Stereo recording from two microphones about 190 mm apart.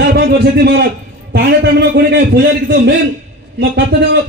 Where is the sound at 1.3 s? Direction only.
60° right (ahead or behind).